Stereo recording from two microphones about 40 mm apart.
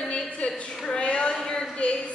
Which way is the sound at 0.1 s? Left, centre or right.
Left.